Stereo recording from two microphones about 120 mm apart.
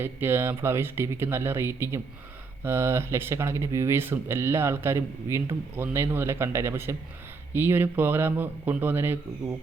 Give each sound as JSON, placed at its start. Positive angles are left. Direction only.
{"t": 0.0, "sound": "a man's voice", "side_deg": -20}